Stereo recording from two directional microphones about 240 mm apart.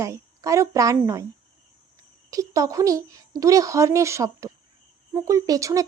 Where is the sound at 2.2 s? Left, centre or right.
Centre.